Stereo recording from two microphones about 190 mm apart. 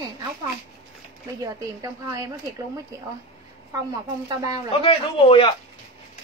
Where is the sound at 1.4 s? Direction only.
15° right (ahead or behind).